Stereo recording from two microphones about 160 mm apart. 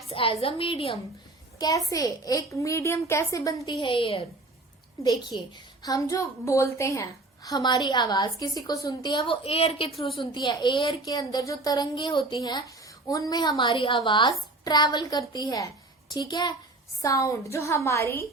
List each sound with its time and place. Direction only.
0.1 s a woman's voice: 35° left (ahead or behind)
1.5 s speech: 25° left (ahead or behind)
5.3 s a woman's voice: 25° left (ahead or behind)